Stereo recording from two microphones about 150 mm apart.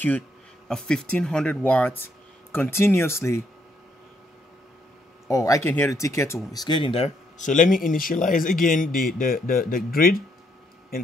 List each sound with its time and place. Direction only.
0.7 s speech: 5° left (ahead or behind)
5.3 s speech: 20° left (ahead or behind); by 7.4 s 40° left (ahead or behind)
7.4 s speech: 60° left (ahead or behind); by 10.1 s 75° left (ahead or behind)